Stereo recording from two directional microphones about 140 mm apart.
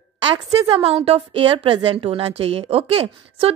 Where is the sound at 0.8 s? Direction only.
45° right (ahead or behind).